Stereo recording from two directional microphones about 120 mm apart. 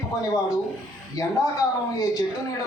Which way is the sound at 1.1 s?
30° left (ahead or behind).